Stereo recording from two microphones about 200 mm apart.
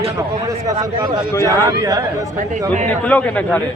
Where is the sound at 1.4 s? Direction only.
15° right (ahead or behind).